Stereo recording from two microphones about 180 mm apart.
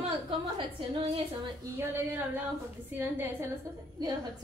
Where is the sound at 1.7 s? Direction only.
15° right (ahead or behind).